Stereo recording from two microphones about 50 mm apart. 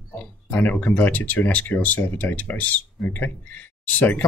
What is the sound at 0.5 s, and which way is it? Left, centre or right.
Speech, left.